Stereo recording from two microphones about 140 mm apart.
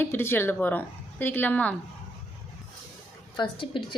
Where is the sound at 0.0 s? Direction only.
15° left (ahead or behind).